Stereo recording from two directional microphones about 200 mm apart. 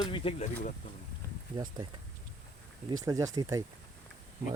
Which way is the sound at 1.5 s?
20° right (ahead or behind).